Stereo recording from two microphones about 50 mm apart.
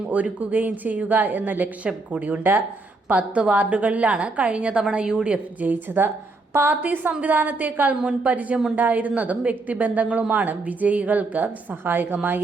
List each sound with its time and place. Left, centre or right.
0.1 s speech: right
3.1 s a woman's voice: right
5.5 s a woman's voice: right